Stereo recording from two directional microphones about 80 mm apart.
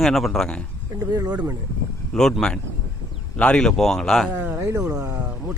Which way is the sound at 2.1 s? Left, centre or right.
Centre.